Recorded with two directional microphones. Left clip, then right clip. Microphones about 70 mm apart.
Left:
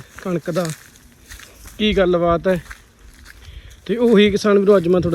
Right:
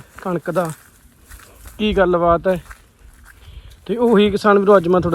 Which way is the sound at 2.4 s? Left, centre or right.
Centre.